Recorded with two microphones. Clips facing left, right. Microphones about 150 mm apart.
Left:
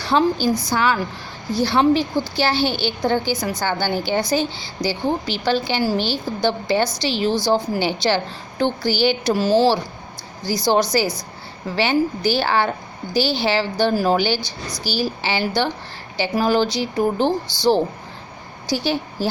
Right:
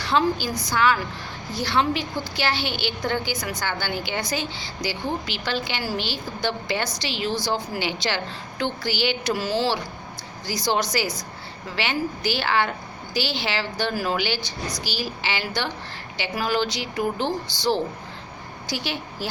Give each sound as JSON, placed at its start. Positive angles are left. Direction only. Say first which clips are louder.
{"t": 0.0, "sound": "a woman's voice", "louder": "left 4 dB", "side_deg": 35}